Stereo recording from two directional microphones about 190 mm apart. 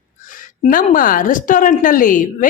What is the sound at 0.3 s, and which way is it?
A woman's voice, 45° left (ahead or behind).